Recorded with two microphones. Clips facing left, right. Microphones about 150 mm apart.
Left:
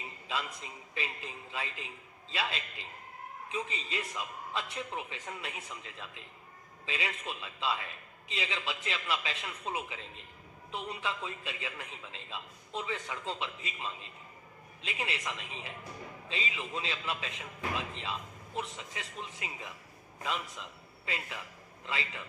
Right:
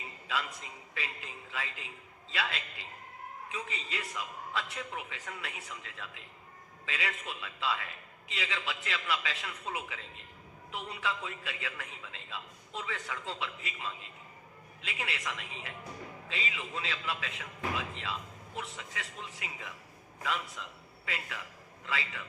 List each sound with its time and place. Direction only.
0.9 s a man's voice: 20° left (ahead or behind)